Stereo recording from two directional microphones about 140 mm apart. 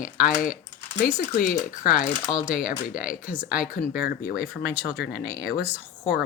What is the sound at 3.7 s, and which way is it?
Speech, 90° left.